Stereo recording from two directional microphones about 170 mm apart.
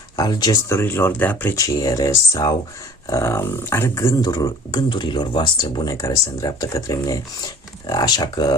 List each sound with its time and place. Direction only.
0.2 s speech: 25° left (ahead or behind)